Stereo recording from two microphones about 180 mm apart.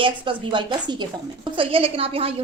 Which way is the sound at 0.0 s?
25° right (ahead or behind).